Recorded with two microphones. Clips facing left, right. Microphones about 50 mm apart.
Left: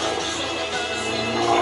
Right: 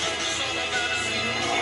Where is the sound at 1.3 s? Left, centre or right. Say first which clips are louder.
Left 10 dB; left.